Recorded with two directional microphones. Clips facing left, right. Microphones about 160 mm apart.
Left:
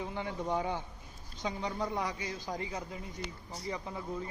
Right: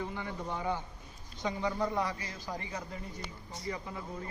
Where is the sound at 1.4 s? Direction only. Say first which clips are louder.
Right 3 dB; 15° left (ahead or behind).